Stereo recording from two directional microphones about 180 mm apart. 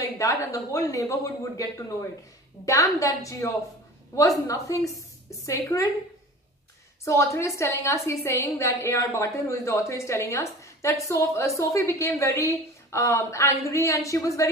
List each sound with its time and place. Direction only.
0.0 s a woman's voice: 20° left (ahead or behind)
7.1 s a woman's voice: 15° left (ahead or behind)